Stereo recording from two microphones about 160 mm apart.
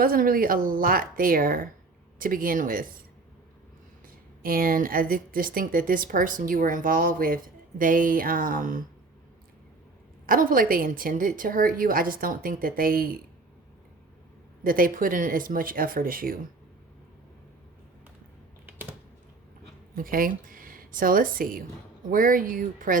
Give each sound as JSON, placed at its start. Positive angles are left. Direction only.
{"t": 0.0, "sound": "speech", "side_deg": -65}
{"t": 4.0, "sound": "speech", "side_deg": -65}
{"t": 10.2, "sound": "speech", "side_deg": -60}
{"t": 14.6, "sound": "speech", "side_deg": -60}
{"t": 18.6, "sound": "typing", "side_deg": -10}
{"t": 20.0, "sound": "speech", "side_deg": -60}